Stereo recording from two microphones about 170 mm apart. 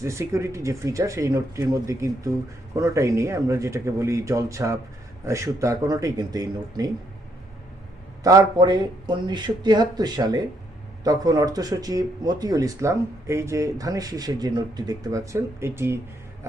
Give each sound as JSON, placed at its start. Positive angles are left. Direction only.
{"t": 0.0, "sound": "speech", "side_deg": -15}
{"t": 8.2, "sound": "speech", "side_deg": -20}